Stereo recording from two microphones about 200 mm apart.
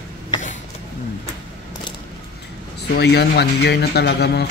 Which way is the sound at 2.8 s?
55° left (ahead or behind).